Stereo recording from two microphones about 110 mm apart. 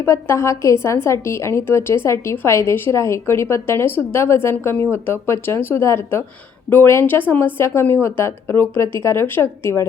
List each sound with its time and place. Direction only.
0.0 s a woman's voice: 25° left (ahead or behind)